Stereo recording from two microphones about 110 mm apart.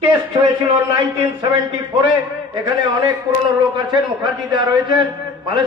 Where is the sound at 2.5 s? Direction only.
35° right (ahead or behind).